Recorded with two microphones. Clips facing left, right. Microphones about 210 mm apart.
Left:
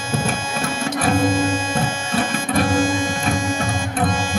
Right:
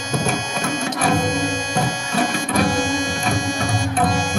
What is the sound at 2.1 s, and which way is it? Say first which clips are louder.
Music: even; 40° right (ahead or behind).